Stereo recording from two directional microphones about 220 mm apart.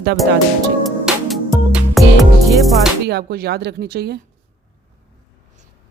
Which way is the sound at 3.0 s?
45° right (ahead or behind).